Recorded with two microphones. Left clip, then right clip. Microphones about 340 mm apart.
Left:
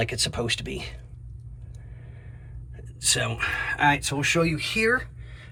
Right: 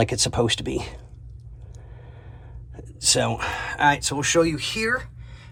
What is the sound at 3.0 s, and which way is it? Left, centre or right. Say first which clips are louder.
Speech: right 3 dB; centre.